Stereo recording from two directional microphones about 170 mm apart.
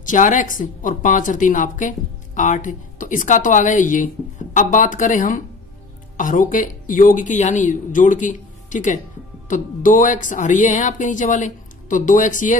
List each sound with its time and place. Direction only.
0.0 s a woman's voice: 50° left (ahead or behind)